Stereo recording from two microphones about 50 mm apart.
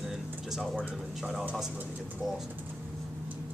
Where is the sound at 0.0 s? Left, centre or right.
Centre.